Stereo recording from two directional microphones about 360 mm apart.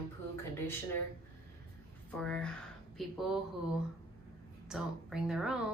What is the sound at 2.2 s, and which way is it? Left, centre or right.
Speech, centre.